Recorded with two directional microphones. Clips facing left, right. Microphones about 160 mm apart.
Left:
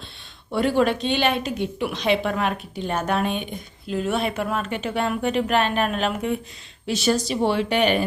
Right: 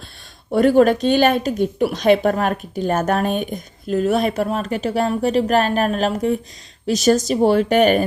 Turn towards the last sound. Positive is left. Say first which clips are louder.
# right 6 dB
turn(degrees=-45)  # may be behind; listen again after turning